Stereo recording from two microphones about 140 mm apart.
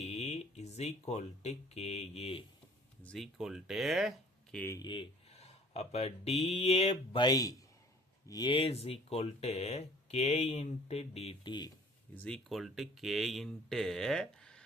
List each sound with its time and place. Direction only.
0.0 s speech: 50° left (ahead or behind)
3.0 s speech: 5° left (ahead or behind)
4.5 s speech: 15° left (ahead or behind)
4.8 s speech: 35° left (ahead or behind)
7.2 s a man's voice: 25° left (ahead or behind); by 11.3 s 45° left (ahead or behind)
11.4 s speech: 30° left (ahead or behind)
12.1 s speech: 5° left (ahead or behind)